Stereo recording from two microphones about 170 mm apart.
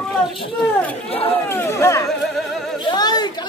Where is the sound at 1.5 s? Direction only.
15° left (ahead or behind).